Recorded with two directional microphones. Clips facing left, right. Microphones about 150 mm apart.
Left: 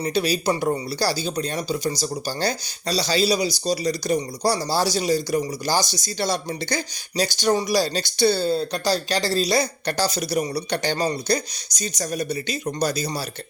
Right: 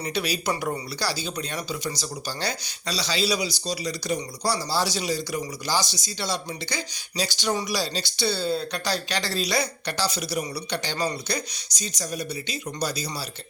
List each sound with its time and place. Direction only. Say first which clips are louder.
0.0 s speech: left 5 dB; 35° left (ahead or behind)